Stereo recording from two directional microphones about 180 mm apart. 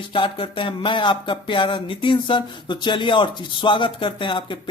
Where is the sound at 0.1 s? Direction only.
30° left (ahead or behind).